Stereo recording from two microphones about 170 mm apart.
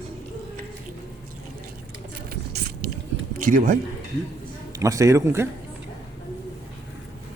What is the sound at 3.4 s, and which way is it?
Speech, 55° right (ahead or behind).